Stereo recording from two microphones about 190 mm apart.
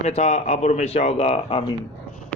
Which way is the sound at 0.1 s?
35° left (ahead or behind).